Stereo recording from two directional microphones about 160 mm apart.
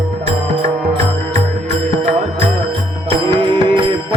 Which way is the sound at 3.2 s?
30° right (ahead or behind).